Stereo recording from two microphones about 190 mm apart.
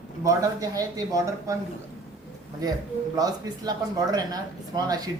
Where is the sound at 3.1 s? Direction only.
20° right (ahead or behind).